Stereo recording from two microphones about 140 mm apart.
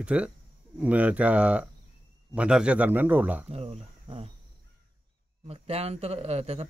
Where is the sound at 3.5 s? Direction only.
45° right (ahead or behind).